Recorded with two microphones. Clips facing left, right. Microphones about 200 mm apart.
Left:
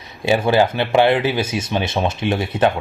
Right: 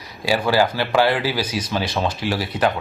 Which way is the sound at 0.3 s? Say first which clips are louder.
Left 3 dB; 25° left (ahead or behind).